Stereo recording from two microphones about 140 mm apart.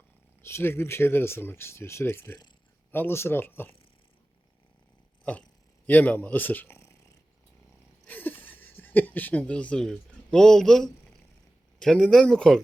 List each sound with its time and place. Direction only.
0.4 s speech: 15° left (ahead or behind)
5.2 s speech: 10° left (ahead or behind)
8.0 s speech: 15° left (ahead or behind)